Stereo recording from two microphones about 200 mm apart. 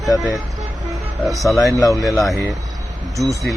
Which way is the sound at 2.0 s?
Centre (ahead or behind).